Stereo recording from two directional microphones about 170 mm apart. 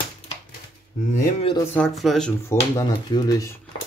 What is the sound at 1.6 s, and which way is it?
Speech, 10° left (ahead or behind).